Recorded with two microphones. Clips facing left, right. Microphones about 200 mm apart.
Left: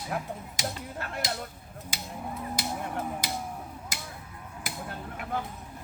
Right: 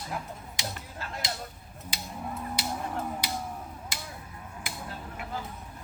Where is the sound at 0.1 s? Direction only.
65° left (ahead or behind).